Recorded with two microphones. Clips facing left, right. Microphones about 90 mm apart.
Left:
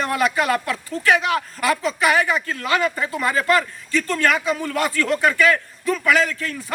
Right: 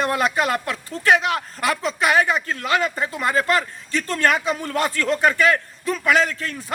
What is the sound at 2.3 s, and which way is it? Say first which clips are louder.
Speech: even; 30° right (ahead or behind).